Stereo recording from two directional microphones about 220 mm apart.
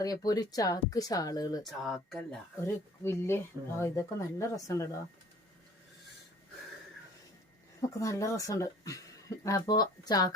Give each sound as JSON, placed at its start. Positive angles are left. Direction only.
{"t": 0.0, "sound": "speech", "side_deg": 15}
{"t": 1.6, "sound": "speech", "side_deg": 0}
{"t": 7.8, "sound": "speech", "side_deg": 15}